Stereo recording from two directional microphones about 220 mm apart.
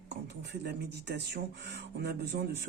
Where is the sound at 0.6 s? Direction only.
50° right (ahead or behind).